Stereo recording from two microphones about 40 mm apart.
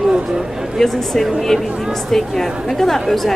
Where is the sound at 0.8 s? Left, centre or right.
Centre.